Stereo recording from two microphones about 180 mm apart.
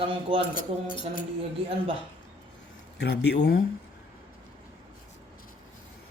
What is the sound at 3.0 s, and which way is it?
Speech, 70° left (ahead or behind).